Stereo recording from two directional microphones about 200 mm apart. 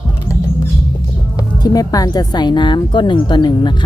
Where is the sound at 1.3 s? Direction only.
20° left (ahead or behind).